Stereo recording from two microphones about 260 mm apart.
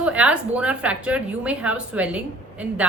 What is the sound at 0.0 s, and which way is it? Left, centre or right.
A woman's voice, centre.